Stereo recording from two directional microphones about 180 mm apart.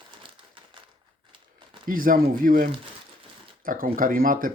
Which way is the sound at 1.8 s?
50° right (ahead or behind).